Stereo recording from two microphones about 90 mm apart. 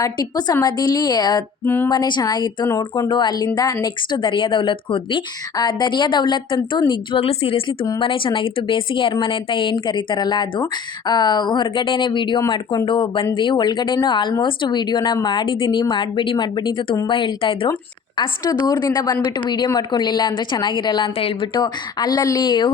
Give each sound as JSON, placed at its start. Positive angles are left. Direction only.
{"t": 0.2, "sound": "a woman's voice", "side_deg": 50}
{"t": 1.6, "sound": "speech", "side_deg": 25}
{"t": 1.9, "sound": "a woman's voice", "side_deg": 55}
{"t": 3.5, "sound": "speech", "side_deg": 45}
{"t": 5.5, "sound": "speech", "side_deg": 55}
{"t": 7.9, "sound": "speech", "side_deg": 70}
{"t": 18.6, "sound": "a woman's voice", "side_deg": 45}
{"t": 19.6, "sound": "speech", "side_deg": 50}
{"t": 21.2, "sound": "a woman's voice", "side_deg": 75}
{"t": 22.4, "sound": "speech", "side_deg": 60}